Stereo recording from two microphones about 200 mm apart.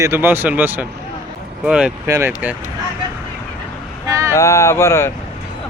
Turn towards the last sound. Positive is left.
turn(degrees=15)  # may be behind; listen again after turning